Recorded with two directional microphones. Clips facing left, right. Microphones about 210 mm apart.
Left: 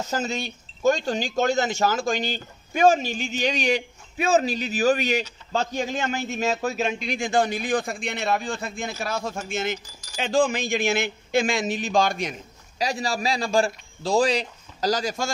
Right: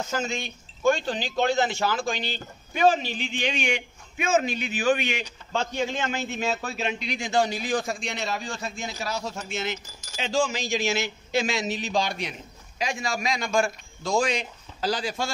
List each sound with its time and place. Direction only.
0.0 s a man's voice: 40° left (ahead or behind)